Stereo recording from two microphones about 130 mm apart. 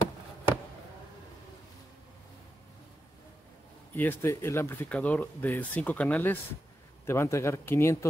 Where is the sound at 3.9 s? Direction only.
15° left (ahead or behind).